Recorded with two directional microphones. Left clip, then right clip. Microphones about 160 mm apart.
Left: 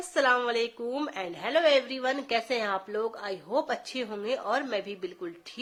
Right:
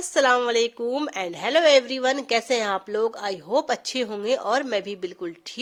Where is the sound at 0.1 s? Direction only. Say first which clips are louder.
Right 5 dB; 60° right (ahead or behind).